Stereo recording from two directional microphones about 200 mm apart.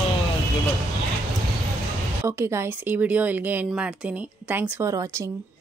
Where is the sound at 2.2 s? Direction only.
10° right (ahead or behind).